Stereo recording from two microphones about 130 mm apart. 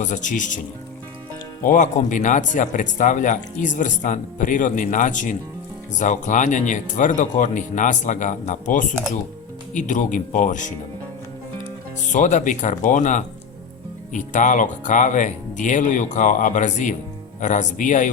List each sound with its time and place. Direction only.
0.0 s speech: 75° left (ahead or behind)
1.6 s speech: 75° left (ahead or behind)
12.1 s speech: 70° left (ahead or behind)